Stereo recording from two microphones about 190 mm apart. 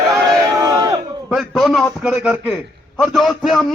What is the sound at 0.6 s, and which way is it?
Crowd, 15° right (ahead or behind).